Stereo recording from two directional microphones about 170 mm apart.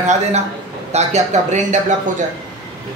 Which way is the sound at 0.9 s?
40° right (ahead or behind).